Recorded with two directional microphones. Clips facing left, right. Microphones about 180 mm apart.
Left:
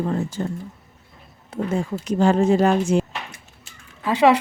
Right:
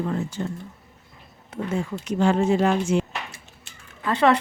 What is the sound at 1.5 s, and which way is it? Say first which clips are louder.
Speech: left 3 dB; 35° left (ahead or behind).